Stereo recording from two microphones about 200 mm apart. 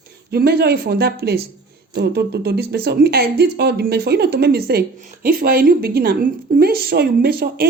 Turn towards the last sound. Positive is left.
turn(degrees=-50)  # may be behind; listen again after turning